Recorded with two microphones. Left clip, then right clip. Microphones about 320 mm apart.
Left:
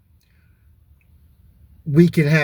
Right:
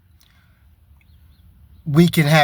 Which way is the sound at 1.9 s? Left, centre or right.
Centre.